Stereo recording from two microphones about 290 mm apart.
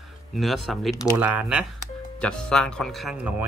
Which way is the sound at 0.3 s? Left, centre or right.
Centre.